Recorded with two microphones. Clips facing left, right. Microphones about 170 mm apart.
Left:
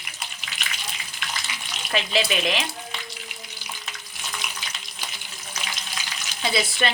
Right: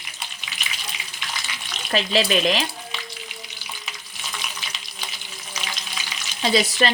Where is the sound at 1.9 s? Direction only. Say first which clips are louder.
Right 4 dB; 35° right (ahead or behind).